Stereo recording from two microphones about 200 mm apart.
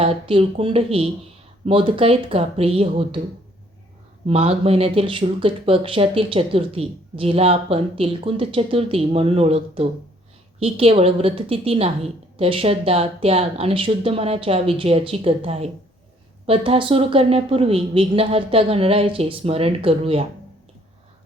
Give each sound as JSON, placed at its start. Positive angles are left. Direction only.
{"t": 0.0, "sound": "speech", "side_deg": -30}
{"t": 4.3, "sound": "speech", "side_deg": -30}